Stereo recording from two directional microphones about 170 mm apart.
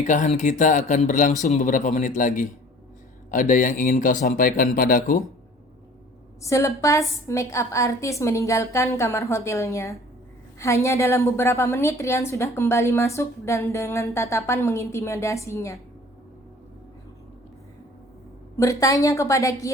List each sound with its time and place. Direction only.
0.0 s speech: 45° left (ahead or behind)
6.4 s a woman's voice: 20° left (ahead or behind)
18.5 s a woman's voice: 20° left (ahead or behind)